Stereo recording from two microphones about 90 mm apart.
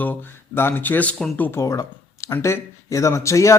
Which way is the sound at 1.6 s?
35° left (ahead or behind).